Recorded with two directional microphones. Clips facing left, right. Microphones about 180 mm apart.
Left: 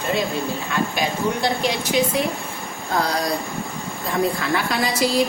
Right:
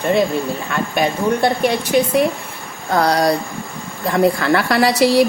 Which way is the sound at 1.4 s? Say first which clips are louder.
Right 5 dB; 55° right (ahead or behind).